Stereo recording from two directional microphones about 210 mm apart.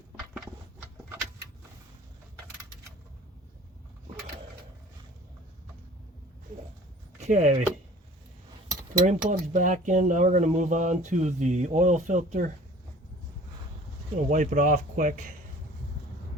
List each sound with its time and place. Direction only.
7.2 s speech: 30° right (ahead or behind)
8.7 s speech: 35° right (ahead or behind)
14.3 s speech: 40° right (ahead or behind)